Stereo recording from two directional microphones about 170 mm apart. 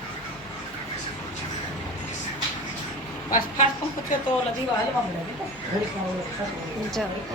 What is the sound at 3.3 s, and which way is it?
Speech, 50° left (ahead or behind).